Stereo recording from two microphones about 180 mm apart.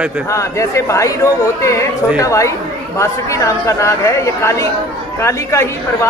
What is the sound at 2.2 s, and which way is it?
Speech, 15° left (ahead or behind).